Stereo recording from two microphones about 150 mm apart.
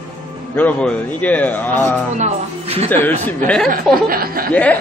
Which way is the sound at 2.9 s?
10° left (ahead or behind).